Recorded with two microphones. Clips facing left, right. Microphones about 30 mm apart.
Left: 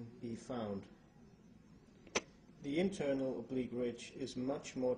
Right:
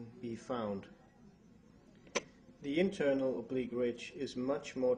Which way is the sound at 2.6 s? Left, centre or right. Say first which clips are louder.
Right 4 dB; centre.